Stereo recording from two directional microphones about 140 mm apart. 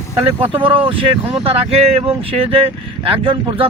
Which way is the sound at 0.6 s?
40° right (ahead or behind).